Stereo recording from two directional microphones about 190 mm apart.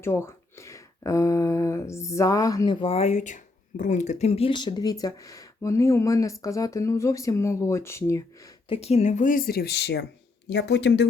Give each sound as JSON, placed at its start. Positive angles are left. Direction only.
{"t": 0.0, "sound": "speech", "side_deg": 15}
{"t": 2.8, "sound": "speech", "side_deg": 35}
{"t": 8.7, "sound": "speech", "side_deg": 35}